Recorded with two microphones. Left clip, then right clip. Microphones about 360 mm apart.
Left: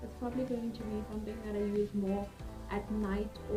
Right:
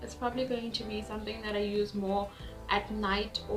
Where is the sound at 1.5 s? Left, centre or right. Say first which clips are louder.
Right 3 dB; right.